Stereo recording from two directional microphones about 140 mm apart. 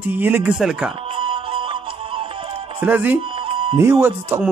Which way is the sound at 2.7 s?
15° right (ahead or behind).